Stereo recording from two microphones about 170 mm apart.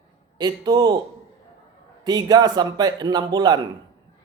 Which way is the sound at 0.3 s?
25° right (ahead or behind).